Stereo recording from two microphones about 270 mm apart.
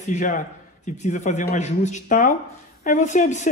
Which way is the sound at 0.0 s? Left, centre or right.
Left.